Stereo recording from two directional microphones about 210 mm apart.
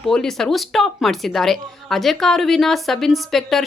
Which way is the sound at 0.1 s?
Centre (ahead or behind).